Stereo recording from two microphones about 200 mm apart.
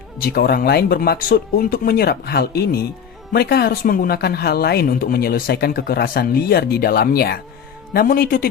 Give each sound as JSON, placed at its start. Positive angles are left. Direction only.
{"t": 0.2, "sound": "speech", "side_deg": 50}